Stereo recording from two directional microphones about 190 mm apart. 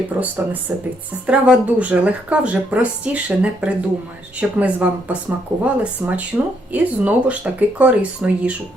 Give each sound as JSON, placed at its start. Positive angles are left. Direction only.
{"t": 0.2, "sound": "speech", "side_deg": -10}